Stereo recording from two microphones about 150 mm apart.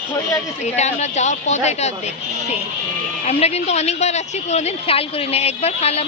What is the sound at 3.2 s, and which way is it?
A woman's voice, 45° left (ahead or behind).